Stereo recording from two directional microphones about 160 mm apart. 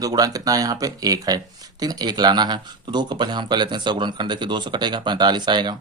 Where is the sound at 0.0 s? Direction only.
25° right (ahead or behind).